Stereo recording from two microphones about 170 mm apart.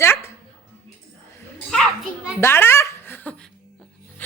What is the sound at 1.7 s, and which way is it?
Speech, centre (ahead or behind).